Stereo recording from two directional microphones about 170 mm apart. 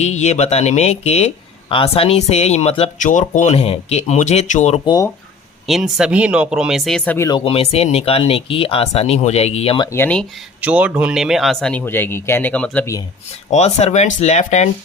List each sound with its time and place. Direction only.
0.0 s speech: 40° left (ahead or behind)
5.6 s speech: centre (ahead or behind)
7.3 s speech: 30° left (ahead or behind)
9.9 s speech: 10° left (ahead or behind)
10.6 s speech: 10° right (ahead or behind); by 12.9 s 10° left (ahead or behind)
13.5 s speech: 40° left (ahead or behind)